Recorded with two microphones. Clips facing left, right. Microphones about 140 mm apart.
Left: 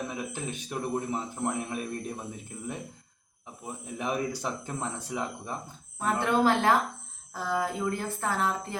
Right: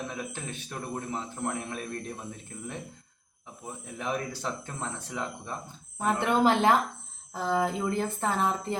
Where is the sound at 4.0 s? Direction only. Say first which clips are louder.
Left 2 dB; 10° left (ahead or behind).